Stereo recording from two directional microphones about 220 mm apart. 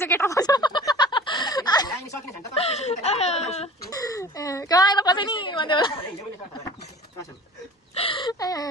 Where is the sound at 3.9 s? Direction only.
15° left (ahead or behind).